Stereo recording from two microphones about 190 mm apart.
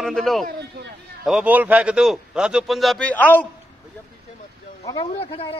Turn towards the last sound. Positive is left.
turn(degrees=30)  # may be behind; listen again after turning